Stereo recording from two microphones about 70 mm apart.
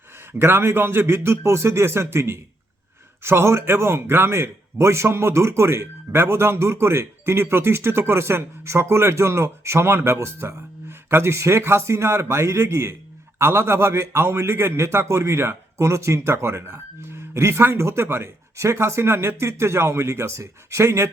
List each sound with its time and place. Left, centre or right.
0.3 s a man's voice: right